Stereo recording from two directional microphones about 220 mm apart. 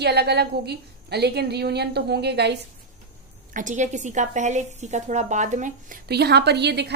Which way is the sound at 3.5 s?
35° right (ahead or behind).